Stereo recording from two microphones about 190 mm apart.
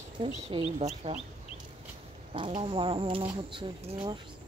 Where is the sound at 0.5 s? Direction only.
30° right (ahead or behind).